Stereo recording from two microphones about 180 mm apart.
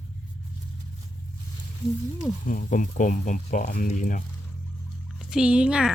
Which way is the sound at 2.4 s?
45° left (ahead or behind).